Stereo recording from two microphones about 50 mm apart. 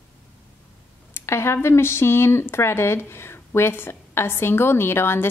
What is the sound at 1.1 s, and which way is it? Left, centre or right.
Speech, left.